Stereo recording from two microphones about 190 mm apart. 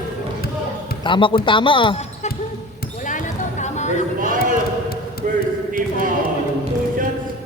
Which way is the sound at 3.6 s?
35° left (ahead or behind).